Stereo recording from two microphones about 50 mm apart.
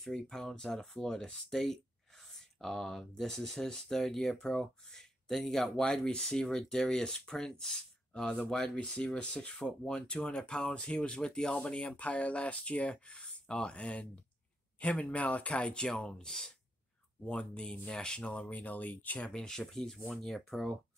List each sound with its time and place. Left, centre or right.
0.0 s speech: centre
12.0 s speech: left
19.2 s speech: centre